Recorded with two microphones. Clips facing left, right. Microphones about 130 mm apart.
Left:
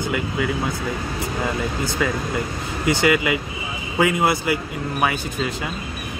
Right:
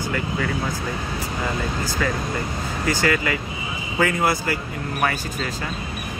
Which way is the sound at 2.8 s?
15° left (ahead or behind).